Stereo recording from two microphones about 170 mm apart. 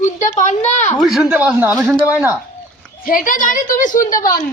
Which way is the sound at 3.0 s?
55° left (ahead or behind).